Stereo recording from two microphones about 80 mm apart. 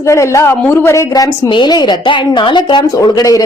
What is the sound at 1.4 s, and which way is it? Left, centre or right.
A woman's voice, left.